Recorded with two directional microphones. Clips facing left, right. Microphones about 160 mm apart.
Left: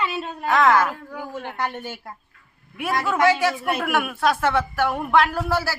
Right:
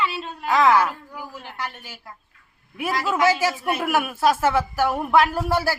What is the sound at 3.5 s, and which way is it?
A woman's voice, 5° right (ahead or behind).